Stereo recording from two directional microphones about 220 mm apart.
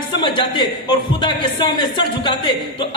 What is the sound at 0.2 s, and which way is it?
Speech, 20° left (ahead or behind).